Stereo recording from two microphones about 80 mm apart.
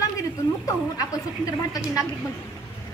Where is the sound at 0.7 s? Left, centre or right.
Left.